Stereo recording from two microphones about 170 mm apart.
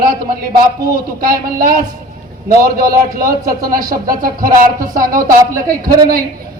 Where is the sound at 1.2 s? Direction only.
55° right (ahead or behind).